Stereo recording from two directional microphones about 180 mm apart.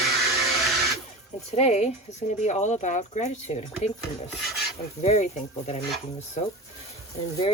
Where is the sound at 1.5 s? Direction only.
35° left (ahead or behind).